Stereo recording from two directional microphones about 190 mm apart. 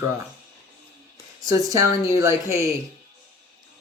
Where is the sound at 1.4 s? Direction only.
20° right (ahead or behind).